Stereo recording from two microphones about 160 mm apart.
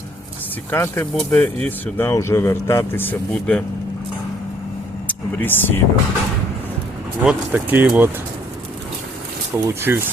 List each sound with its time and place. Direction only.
0.7 s speech: 15° left (ahead or behind)
2.0 s speech: 20° left (ahead or behind)
5.0 s speech: 10° left (ahead or behind)
7.2 s speech: 10° right (ahead or behind)
9.6 s speech: 15° right (ahead or behind)